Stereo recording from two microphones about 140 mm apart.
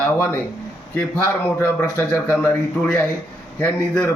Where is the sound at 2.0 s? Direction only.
15° left (ahead or behind).